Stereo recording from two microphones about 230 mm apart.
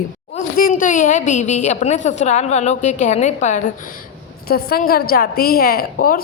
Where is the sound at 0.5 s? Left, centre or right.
Left.